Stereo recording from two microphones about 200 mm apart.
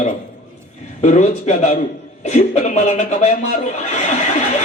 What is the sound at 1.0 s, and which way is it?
Speech, 35° left (ahead or behind).